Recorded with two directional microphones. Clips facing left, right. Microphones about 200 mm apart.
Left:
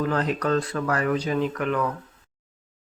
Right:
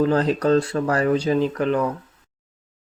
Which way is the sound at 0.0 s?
30° right (ahead or behind).